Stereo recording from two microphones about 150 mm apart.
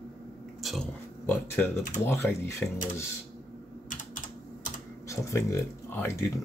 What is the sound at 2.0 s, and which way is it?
Speech, 15° left (ahead or behind).